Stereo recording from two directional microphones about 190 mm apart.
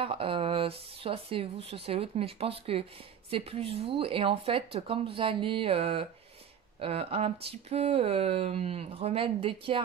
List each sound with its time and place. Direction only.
0.0 s speech: 30° right (ahead or behind)